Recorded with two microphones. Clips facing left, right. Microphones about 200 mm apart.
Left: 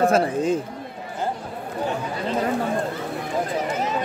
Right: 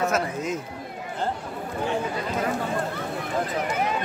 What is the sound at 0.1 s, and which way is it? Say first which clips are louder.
Speech: left 6 dB; 30° left (ahead or behind).